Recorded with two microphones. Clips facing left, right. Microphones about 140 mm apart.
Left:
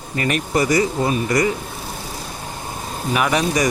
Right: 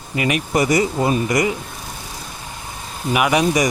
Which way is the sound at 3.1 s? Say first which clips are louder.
Right 2 dB; 10° right (ahead or behind).